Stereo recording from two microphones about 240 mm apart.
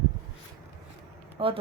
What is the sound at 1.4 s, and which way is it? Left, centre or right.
Speech, right.